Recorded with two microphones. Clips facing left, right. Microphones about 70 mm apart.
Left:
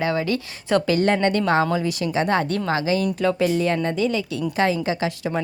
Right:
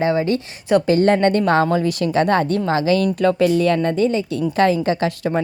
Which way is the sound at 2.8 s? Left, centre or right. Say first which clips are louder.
Right 6 dB; right.